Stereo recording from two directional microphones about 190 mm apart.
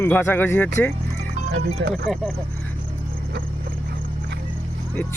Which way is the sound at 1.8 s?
65° right (ahead or behind).